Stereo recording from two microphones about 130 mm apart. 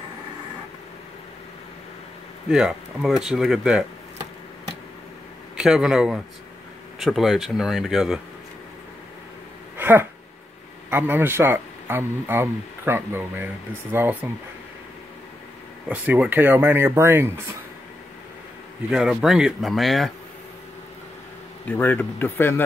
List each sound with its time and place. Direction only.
2.5 s speech: 5° right (ahead or behind)
5.6 s speech: 5° right (ahead or behind)
9.8 s a sound: 15° right (ahead or behind)
10.9 s speech: 15° right (ahead or behind)
15.9 s speech: 10° right (ahead or behind)
18.9 s speech: 5° right (ahead or behind)
21.6 s speech: 15° left (ahead or behind)